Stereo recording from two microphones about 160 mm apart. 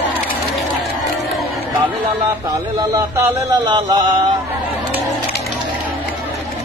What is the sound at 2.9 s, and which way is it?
Speech, 20° right (ahead or behind).